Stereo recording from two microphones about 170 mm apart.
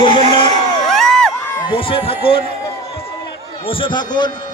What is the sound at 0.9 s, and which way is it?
Crowd, 5° left (ahead or behind).